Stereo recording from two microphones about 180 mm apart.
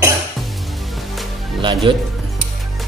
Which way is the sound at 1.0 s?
Centre (ahead or behind).